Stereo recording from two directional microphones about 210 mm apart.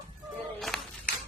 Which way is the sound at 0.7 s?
Centre (ahead or behind).